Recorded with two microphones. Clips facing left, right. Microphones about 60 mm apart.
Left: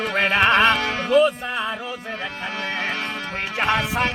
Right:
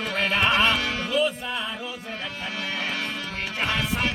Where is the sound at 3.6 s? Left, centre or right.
Left.